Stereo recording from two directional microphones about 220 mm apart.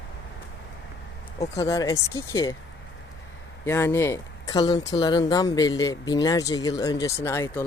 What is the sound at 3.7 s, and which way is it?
Speech, 10° left (ahead or behind).